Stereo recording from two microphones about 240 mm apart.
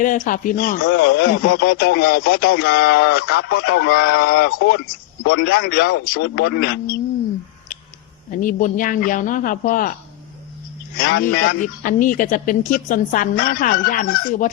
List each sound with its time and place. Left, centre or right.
0.0 s a woman's voice: left
8.3 s a woman's voice: left
11.0 s a woman's voice: left